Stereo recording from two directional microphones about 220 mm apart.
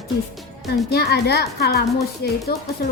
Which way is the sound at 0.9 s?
45° left (ahead or behind).